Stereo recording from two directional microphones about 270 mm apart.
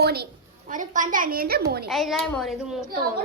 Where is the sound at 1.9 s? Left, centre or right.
Centre.